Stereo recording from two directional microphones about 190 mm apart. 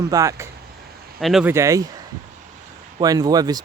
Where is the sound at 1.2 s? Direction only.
Centre (ahead or behind).